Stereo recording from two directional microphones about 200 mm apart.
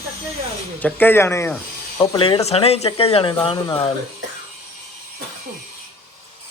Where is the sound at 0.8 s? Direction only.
10° left (ahead or behind).